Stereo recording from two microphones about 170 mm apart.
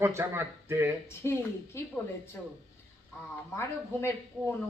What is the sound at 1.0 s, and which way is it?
Speech, 15° left (ahead or behind).